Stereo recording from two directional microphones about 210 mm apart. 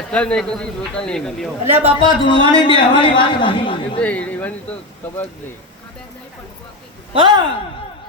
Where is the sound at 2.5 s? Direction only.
25° left (ahead or behind).